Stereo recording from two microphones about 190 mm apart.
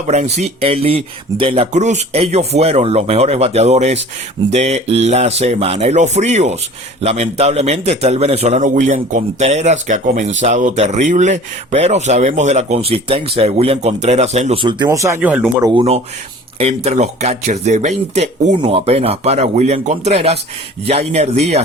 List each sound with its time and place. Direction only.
0.1 s a man's voice: 35° right (ahead or behind)
14.8 s speech: 15° right (ahead or behind)
15.6 s a man's voice: 30° right (ahead or behind)